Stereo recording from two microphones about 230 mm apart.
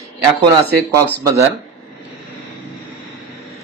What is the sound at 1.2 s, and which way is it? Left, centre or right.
Speech, centre.